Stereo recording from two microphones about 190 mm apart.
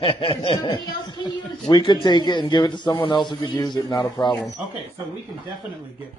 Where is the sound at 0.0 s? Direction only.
30° left (ahead or behind).